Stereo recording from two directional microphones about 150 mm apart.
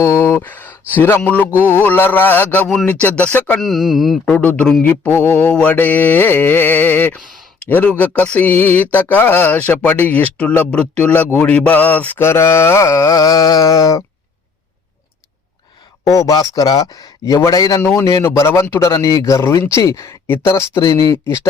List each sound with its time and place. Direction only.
0.0 s speech: 20° left (ahead or behind)
1.5 s music: 10° right (ahead or behind)
1.7 s mantra: 15° left (ahead or behind)
3.6 s speech: centre (ahead or behind)
4.3 s mantra: 10° left (ahead or behind)
16.0 s speech: 20° left (ahead or behind)